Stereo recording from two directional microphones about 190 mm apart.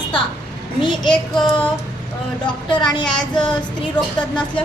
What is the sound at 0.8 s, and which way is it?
Speech, 25° left (ahead or behind).